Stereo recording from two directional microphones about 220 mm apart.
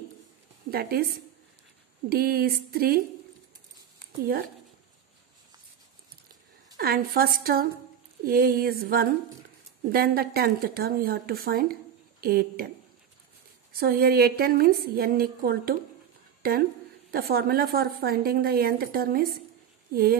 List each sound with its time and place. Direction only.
0.7 s a woman's voice: 45° right (ahead or behind)
2.0 s a woman's voice: 45° right (ahead or behind)
6.8 s a woman's voice: 45° right (ahead or behind)
13.7 s a woman's voice: 45° right (ahead or behind)
17.1 s a woman's voice: 45° right (ahead or behind)